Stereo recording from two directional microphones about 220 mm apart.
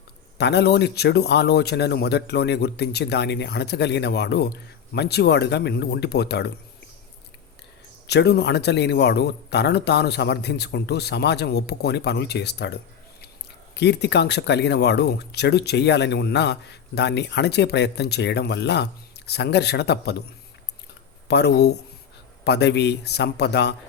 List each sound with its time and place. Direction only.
0.3 s speech: 50° left (ahead or behind)
8.0 s speech: 50° left (ahead or behind)
21.2 s speech: 50° left (ahead or behind)